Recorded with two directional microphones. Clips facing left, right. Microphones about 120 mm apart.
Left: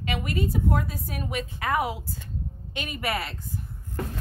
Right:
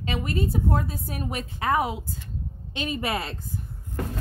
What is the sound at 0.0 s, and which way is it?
A woman's voice, 30° right (ahead or behind).